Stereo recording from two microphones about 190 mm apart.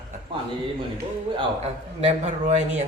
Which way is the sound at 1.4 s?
35° right (ahead or behind).